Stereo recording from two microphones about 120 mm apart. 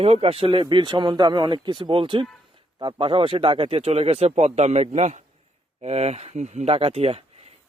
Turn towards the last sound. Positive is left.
turn(degrees=-55)  # may be behind; listen again after turning